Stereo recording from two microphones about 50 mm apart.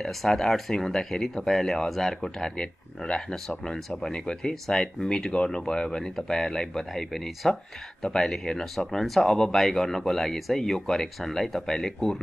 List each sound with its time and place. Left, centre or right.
0.0 s speech: centre